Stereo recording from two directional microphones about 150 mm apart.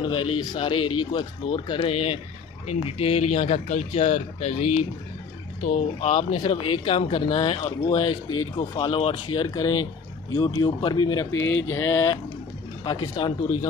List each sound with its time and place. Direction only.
0.0 s speech: 30° left (ahead or behind)